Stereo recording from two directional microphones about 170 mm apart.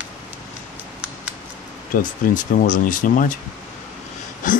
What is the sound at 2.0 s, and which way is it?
Speech, 50° left (ahead or behind).